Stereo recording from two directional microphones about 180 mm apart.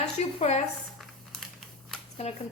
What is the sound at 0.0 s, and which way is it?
Speech, 40° left (ahead or behind).